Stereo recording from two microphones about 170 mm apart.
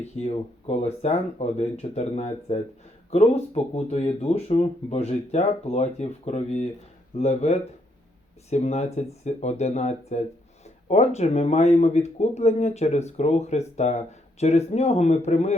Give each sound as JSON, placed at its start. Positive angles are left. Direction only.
{"t": 0.1, "sound": "speech", "side_deg": 35}